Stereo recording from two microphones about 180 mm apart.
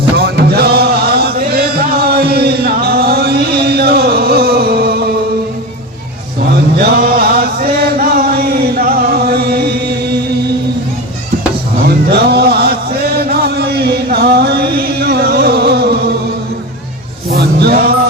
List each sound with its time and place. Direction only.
0.2 s chant: 60° right (ahead or behind)
6.7 s chant: 55° right (ahead or behind)
11.9 s mantra: 60° right (ahead or behind)
13.2 s chant: 60° right (ahead or behind)
17.3 s a sound: 60° right (ahead or behind)